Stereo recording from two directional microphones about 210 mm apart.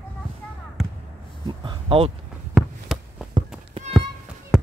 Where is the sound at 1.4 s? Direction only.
20° right (ahead or behind).